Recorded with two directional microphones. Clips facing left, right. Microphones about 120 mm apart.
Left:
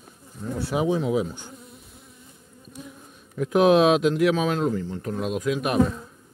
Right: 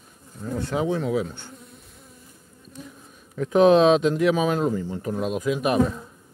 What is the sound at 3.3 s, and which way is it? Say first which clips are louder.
Speech: right 2 dB; 5° left (ahead or behind).